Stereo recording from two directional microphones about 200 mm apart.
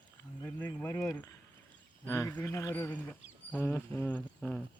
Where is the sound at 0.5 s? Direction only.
10° left (ahead or behind).